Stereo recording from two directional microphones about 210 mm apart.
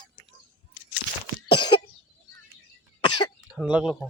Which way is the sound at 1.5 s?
20° left (ahead or behind).